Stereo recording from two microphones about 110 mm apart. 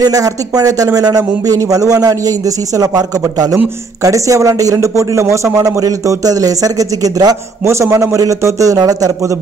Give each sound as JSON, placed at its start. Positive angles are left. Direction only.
{"t": 0.0, "sound": "a man's voice", "side_deg": -35}